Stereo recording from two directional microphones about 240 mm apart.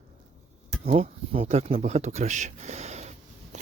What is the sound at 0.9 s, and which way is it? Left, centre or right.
Speech, right.